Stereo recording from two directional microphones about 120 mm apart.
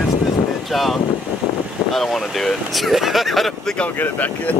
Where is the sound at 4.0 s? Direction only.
15° left (ahead or behind).